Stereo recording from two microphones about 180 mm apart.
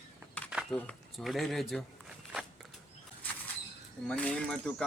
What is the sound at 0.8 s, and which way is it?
Speech, 5° left (ahead or behind).